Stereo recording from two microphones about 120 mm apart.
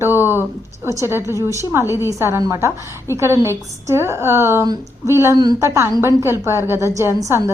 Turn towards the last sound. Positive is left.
turn(degrees=-25)  # may be behind; listen again after turning